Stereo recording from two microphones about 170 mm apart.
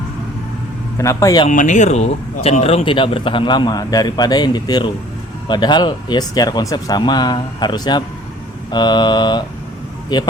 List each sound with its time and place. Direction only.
0.9 s a man's voice: 20° left (ahead or behind)
1.5 s speech: 45° left (ahead or behind); by 10.3 s 25° left (ahead or behind)